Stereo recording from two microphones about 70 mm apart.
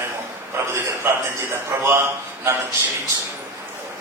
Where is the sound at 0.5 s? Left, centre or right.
Right.